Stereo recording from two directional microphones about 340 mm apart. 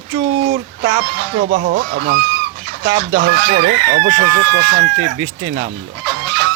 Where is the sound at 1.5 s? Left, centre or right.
Right.